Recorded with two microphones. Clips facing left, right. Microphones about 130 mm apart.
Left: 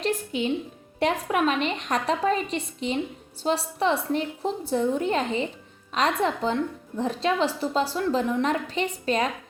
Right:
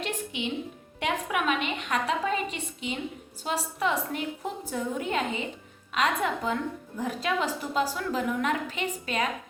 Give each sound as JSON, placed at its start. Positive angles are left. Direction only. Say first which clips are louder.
{"t": 0.0, "sound": "music", "louder": "left 6 dB", "side_deg": 40}
{"t": 0.9, "sound": "a woman's voice", "louder": "left 5 dB", "side_deg": 35}